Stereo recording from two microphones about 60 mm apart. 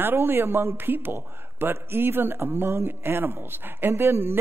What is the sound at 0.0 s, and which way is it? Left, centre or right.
A man's voice, right.